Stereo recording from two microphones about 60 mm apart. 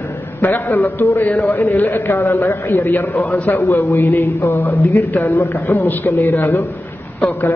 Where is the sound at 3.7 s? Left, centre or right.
Left.